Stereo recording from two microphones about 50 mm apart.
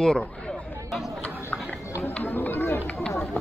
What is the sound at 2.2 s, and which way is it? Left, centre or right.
Chatter, left.